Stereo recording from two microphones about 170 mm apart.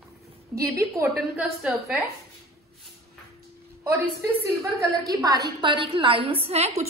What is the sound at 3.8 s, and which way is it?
A woman's voice, 15° right (ahead or behind).